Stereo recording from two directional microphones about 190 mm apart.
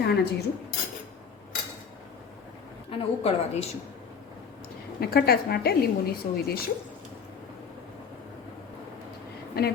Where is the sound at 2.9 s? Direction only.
30° left (ahead or behind).